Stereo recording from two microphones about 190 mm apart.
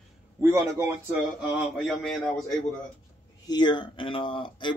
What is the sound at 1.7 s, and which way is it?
Speech, centre (ahead or behind).